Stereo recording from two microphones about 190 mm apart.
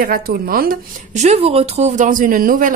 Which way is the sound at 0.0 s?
50° right (ahead or behind).